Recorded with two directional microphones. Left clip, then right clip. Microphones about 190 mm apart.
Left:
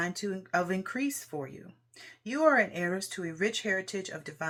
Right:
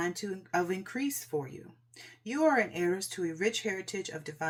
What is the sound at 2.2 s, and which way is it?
Speech, 20° left (ahead or behind).